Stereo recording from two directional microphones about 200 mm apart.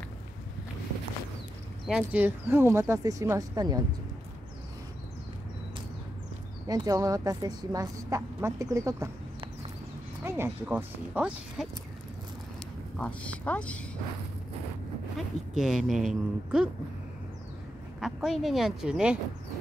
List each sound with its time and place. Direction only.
1.9 s a woman's voice: 5° right (ahead or behind)
6.7 s a woman's voice: 20° right (ahead or behind)
10.2 s a woman's voice: 10° right (ahead or behind)
12.9 s a woman's voice: 5° left (ahead or behind)
15.1 s speech: centre (ahead or behind)
18.0 s speech: centre (ahead or behind)